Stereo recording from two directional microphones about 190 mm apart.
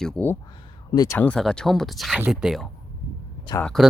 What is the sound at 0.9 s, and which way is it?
Speech, 20° left (ahead or behind).